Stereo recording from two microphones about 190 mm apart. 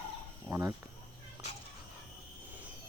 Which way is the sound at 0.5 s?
10° right (ahead or behind).